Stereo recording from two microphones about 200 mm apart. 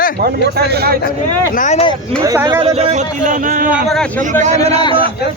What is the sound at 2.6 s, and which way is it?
Speech, 30° right (ahead or behind).